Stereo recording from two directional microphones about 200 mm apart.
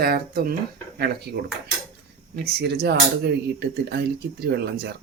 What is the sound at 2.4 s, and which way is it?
Speech, 55° right (ahead or behind).